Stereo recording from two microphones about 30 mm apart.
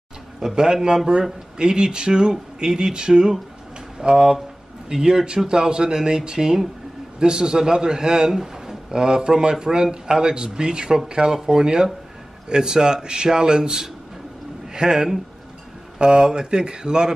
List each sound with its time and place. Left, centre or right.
0.4 s a man's voice: centre
8.3 s a sound: centre
8.9 s a man's voice: right